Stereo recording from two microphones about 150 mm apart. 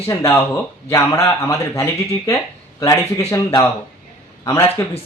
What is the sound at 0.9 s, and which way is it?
Speech, 20° left (ahead or behind).